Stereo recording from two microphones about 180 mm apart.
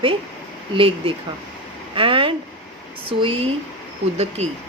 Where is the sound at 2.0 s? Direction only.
30° right (ahead or behind).